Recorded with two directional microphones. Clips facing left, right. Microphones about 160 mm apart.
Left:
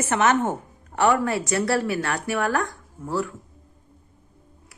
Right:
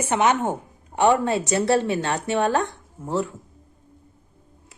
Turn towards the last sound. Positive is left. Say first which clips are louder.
# right 1 dB
turn(degrees=-25)  # may be behind; listen again after turning